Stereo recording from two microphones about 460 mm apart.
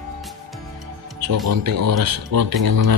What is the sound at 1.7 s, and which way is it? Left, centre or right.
Speech, right.